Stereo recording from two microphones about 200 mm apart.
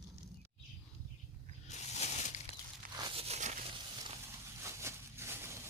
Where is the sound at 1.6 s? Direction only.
35° left (ahead or behind).